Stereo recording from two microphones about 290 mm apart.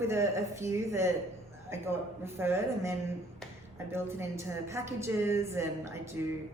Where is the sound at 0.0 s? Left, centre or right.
Centre.